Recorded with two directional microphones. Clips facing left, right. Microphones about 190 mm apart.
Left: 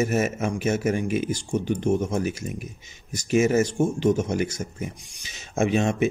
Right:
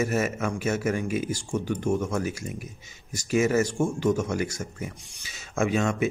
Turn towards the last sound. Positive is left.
turn(degrees=20)  # may be behind; listen again after turning